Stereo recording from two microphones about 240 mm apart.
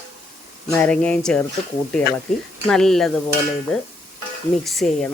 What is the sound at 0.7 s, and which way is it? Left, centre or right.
Speech, centre.